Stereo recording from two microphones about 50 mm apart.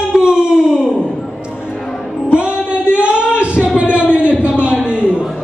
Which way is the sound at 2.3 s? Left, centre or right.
Right.